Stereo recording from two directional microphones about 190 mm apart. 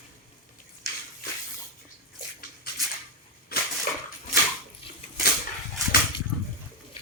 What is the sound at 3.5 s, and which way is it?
Crushing, 55° left (ahead or behind).